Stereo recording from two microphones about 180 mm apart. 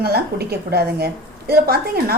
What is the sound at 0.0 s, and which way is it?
A woman's voice, 60° right (ahead or behind).